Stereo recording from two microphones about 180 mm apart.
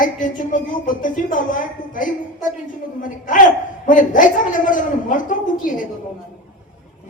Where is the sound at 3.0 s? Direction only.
45° left (ahead or behind).